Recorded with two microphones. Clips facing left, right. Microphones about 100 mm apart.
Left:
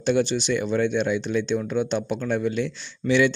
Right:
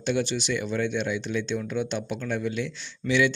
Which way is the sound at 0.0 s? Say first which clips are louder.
Left 5 dB; 35° left (ahead or behind).